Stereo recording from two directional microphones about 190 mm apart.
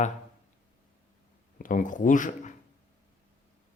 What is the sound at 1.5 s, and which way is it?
Speech, 45° left (ahead or behind).